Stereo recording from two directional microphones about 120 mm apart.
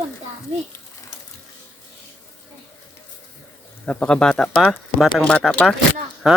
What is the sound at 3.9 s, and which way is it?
Speech, 10° left (ahead or behind).